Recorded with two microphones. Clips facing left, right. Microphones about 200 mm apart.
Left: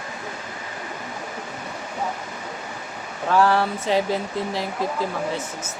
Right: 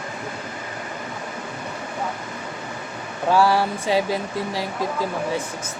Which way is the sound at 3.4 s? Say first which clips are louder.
Left 1 dB; 10° right (ahead or behind).